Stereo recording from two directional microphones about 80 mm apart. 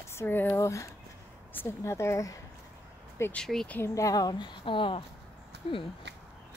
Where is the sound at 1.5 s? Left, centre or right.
Left.